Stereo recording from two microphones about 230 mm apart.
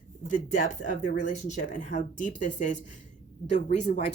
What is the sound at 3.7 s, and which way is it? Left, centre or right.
Speech, left.